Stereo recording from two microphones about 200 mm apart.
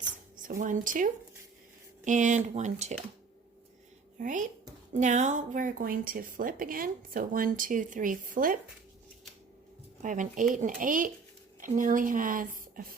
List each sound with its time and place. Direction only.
0.4 s speech: 40° right (ahead or behind)
4.2 s speech: 40° right (ahead or behind)
10.0 s speech: 40° right (ahead or behind)